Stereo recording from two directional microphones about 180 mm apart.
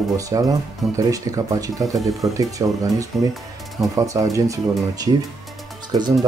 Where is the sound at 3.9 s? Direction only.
20° right (ahead or behind).